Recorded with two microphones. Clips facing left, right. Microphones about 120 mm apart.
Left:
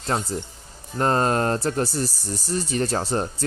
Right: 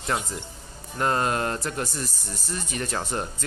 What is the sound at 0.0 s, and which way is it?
Speech, 35° left (ahead or behind).